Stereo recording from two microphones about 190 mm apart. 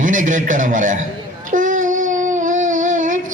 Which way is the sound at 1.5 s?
40° right (ahead or behind).